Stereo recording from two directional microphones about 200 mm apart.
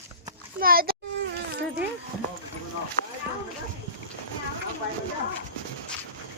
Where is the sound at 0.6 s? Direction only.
50° right (ahead or behind).